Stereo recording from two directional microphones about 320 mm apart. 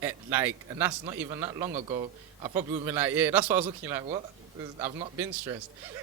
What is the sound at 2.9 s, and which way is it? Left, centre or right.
Speech, centre.